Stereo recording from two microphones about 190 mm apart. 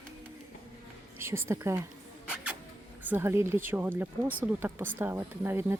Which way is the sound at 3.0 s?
10° right (ahead or behind).